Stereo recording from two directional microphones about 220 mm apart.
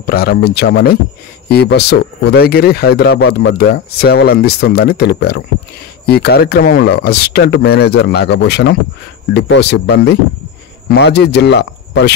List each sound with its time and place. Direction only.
0.0 s speech: 45° left (ahead or behind)